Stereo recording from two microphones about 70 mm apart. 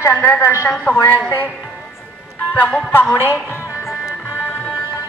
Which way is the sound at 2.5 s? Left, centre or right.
Left.